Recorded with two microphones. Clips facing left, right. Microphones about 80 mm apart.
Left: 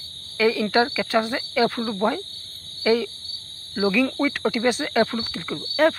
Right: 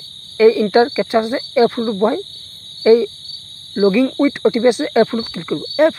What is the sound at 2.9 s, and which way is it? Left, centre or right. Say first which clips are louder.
Speech: right 10 dB; right.